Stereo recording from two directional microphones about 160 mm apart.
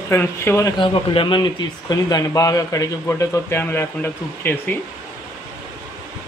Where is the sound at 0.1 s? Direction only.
15° left (ahead or behind).